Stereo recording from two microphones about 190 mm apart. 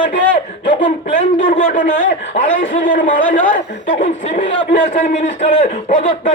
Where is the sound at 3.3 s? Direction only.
45° left (ahead or behind).